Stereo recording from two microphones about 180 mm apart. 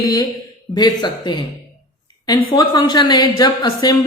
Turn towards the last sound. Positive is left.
turn(degrees=20)  # may be behind; listen again after turning